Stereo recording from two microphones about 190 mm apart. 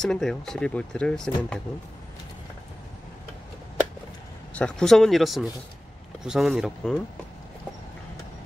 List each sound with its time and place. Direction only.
0.0 s speech: 5° left (ahead or behind)
4.6 s speech: 5° left (ahead or behind)